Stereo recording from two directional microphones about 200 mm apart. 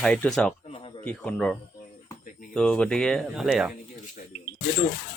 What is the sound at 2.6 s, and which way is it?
Speech, 5° left (ahead or behind).